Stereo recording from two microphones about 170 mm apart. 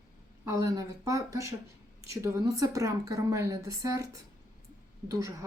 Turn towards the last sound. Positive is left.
turn(degrees=-20)  # may be behind; listen again after turning